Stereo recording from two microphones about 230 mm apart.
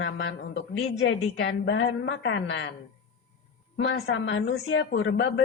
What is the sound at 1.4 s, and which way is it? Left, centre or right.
A woman's voice, left.